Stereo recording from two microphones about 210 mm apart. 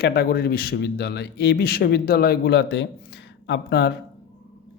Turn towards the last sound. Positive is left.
turn(degrees=50)  # may be behind; listen again after turning